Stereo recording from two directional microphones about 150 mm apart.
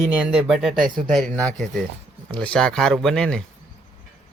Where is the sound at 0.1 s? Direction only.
10° right (ahead or behind).